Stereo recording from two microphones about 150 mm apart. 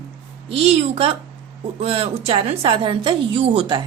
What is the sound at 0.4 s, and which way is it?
A woman's voice, 40° right (ahead or behind).